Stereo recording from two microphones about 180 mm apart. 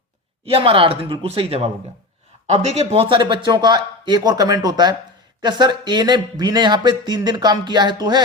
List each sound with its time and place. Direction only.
0.4 s speech: 30° right (ahead or behind)